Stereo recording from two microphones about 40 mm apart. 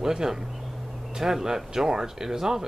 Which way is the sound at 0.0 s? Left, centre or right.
Centre.